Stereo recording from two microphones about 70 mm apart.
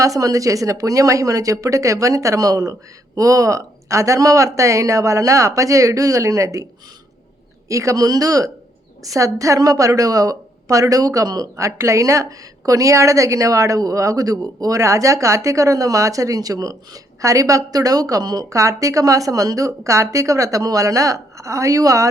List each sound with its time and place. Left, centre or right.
0.0 s a woman's voice: right
7.7 s a woman's voice: right
11.5 s a woman's voice: right